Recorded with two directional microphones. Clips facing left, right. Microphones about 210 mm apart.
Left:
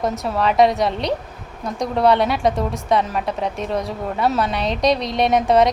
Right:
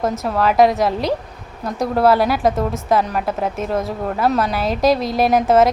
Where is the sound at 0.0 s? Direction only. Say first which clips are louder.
Right 2 dB; centre (ahead or behind).